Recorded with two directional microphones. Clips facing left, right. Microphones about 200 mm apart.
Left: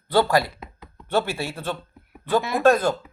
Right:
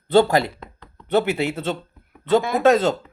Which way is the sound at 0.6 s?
5° left (ahead or behind).